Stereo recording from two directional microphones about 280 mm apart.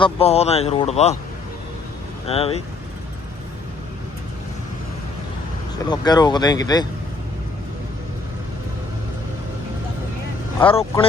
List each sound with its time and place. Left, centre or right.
0.0 s speech: left
2.2 s speech: left
5.9 s speech: centre
10.7 s speech: centre